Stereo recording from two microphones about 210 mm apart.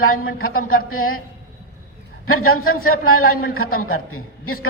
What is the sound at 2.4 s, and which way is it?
A woman's voice, 90° left.